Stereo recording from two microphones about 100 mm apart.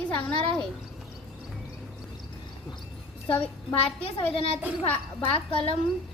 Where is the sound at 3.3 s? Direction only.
15° left (ahead or behind).